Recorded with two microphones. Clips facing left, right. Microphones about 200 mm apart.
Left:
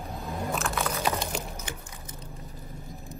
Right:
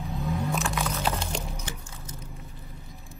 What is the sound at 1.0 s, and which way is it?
Music, 10° left (ahead or behind).